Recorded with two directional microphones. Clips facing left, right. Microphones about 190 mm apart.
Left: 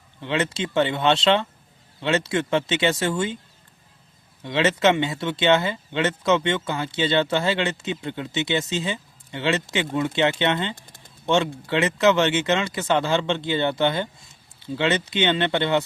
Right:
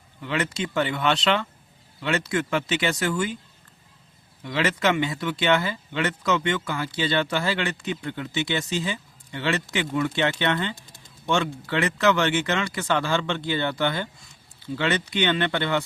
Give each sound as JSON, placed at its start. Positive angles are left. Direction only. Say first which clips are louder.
{"t": 0.2, "sound": "speech", "louder": "left 2 dB", "side_deg": 25}
{"t": 4.4, "sound": "speech", "louder": "left 4 dB", "side_deg": 25}